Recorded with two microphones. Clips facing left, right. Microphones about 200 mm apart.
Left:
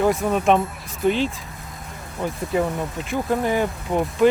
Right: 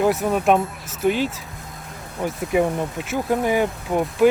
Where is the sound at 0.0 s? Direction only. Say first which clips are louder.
Even; 5° right (ahead or behind).